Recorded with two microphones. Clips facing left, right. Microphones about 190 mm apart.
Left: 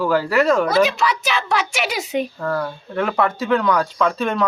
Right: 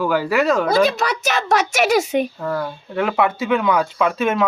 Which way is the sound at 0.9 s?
40° right (ahead or behind).